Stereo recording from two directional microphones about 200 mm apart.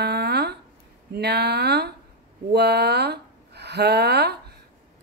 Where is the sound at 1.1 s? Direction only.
55° right (ahead or behind).